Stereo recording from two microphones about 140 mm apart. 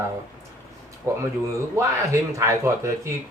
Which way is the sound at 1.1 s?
20° right (ahead or behind).